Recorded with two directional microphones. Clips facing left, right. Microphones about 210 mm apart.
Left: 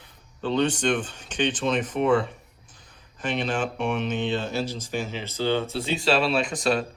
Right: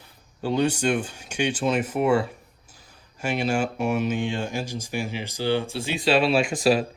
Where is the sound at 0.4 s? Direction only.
10° right (ahead or behind).